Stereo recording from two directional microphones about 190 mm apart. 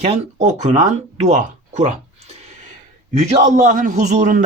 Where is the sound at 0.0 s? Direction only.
35° right (ahead or behind).